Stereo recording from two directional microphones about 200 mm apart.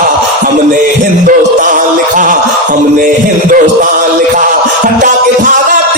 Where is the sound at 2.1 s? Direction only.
40° right (ahead or behind).